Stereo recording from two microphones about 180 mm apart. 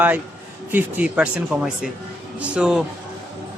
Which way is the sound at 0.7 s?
10° right (ahead or behind).